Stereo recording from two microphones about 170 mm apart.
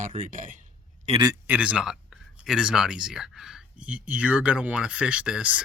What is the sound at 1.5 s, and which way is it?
Speech, 5° right (ahead or behind).